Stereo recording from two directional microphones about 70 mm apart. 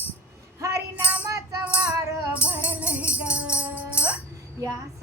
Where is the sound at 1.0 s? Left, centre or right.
Right.